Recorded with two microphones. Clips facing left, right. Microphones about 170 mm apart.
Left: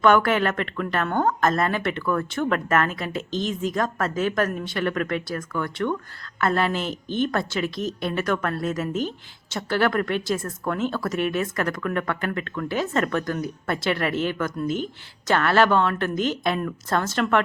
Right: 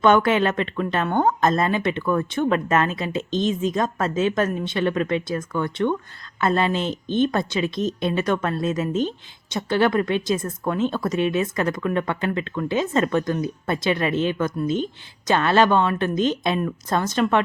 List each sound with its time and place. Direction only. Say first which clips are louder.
0.0 s a woman's voice: right 2 dB; 20° right (ahead or behind)